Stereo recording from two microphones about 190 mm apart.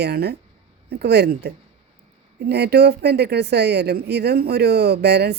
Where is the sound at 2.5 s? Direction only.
60° right (ahead or behind).